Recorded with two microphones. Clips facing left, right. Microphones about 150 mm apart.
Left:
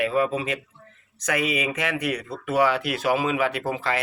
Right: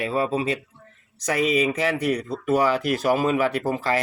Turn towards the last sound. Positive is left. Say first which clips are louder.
# right 3 dB
turn(degrees=-40)  # may be behind; listen again after turning